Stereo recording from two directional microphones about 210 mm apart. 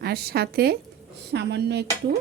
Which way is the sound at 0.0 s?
50° right (ahead or behind).